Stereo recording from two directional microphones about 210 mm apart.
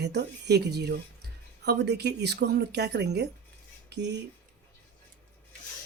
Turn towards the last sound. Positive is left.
turn(degrees=-55)  # may be behind; listen again after turning